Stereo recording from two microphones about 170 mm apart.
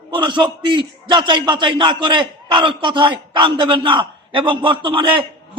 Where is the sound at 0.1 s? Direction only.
30° right (ahead or behind).